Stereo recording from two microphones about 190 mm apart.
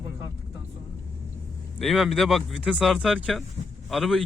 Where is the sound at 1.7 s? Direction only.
Centre (ahead or behind).